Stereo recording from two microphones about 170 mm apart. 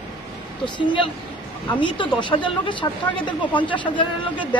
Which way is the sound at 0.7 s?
30° left (ahead or behind).